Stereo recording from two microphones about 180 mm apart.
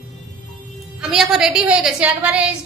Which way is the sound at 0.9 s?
Centre (ahead or behind).